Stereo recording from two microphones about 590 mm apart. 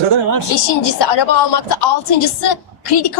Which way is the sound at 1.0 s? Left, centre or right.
Left.